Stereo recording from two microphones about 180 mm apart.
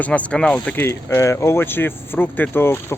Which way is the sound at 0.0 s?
5° left (ahead or behind).